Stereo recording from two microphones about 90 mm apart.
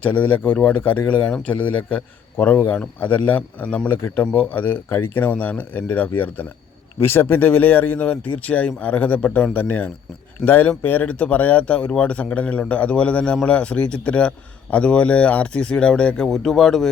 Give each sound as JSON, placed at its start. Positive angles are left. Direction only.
{"t": 0.0, "sound": "speech", "side_deg": 15}